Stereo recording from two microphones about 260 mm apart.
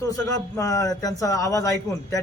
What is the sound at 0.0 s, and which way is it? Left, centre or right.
A man's voice, centre.